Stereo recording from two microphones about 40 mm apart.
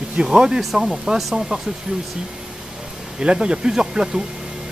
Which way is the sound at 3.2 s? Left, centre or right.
Right.